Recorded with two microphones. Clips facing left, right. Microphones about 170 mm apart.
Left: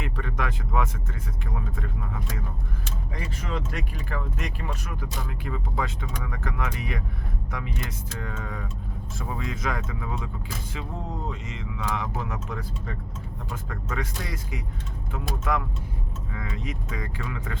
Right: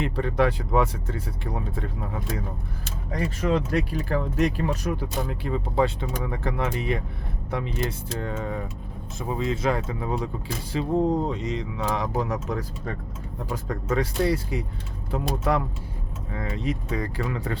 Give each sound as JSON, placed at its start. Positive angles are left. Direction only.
{"t": 0.0, "sound": "speech", "side_deg": -35}